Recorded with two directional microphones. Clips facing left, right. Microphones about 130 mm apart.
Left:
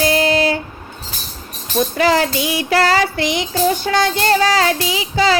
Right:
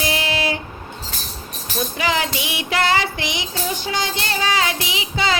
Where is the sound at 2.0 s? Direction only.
45° left (ahead or behind).